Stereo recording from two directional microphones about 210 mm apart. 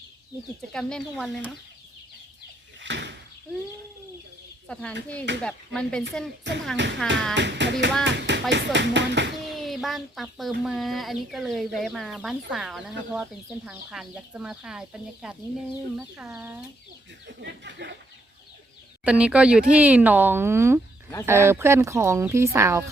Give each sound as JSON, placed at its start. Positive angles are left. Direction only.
{"t": 0.7, "sound": "speech", "side_deg": 5}
{"t": 2.8, "sound": "door", "side_deg": -60}
{"t": 4.7, "sound": "speech", "side_deg": 5}
{"t": 6.5, "sound": "speech", "side_deg": -60}
{"t": 7.0, "sound": "speech", "side_deg": 5}
{"t": 7.3, "sound": "speech", "side_deg": -55}
{"t": 9.6, "sound": "speech", "side_deg": 0}
{"t": 17.2, "sound": "speech", "side_deg": -55}
{"t": 19.0, "sound": "speech", "side_deg": -5}